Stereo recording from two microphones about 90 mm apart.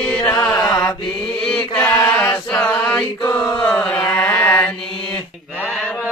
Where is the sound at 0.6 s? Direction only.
45° left (ahead or behind).